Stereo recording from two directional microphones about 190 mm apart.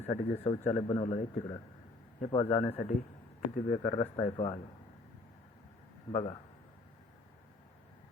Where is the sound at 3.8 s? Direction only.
20° left (ahead or behind).